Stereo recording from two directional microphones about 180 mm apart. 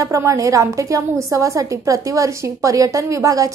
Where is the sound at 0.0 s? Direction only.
15° right (ahead or behind).